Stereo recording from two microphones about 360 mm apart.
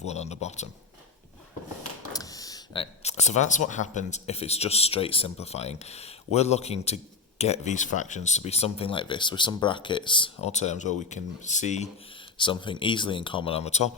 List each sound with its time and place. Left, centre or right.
0.0 s speech: centre
2.1 s speech: centre